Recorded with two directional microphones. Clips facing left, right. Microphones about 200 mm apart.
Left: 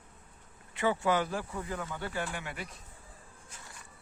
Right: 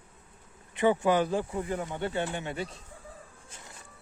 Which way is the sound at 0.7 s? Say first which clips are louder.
Right 5 dB; 20° right (ahead or behind).